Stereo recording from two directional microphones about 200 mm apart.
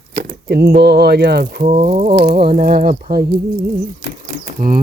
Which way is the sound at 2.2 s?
50° right (ahead or behind).